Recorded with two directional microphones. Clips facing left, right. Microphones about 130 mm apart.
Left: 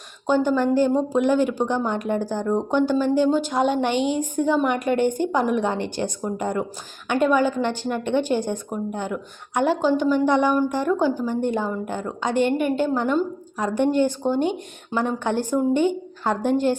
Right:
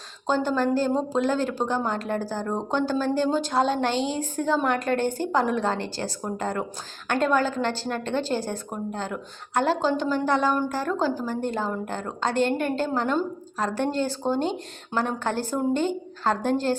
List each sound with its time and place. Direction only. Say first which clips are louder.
0.3 s a woman's voice: left 4 dB; 15° left (ahead or behind)